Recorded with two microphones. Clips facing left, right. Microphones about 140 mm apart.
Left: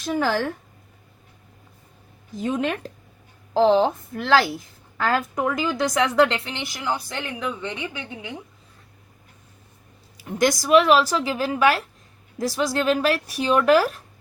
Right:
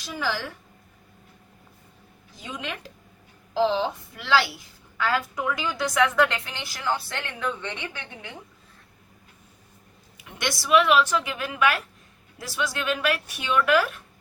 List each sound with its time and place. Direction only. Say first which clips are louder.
0.0 s a woman's voice: left 7 dB; 50° left (ahead or behind)
2.3 s a woman's voice: left 11 dB; 50° left (ahead or behind); by 8.4 s 15° left (ahead or behind)
10.2 s a woman's voice: left 10 dB; 40° left (ahead or behind)